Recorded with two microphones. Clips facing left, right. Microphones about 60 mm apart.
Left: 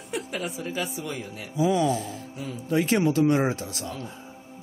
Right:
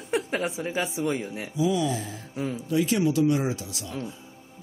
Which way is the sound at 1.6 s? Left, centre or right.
Left.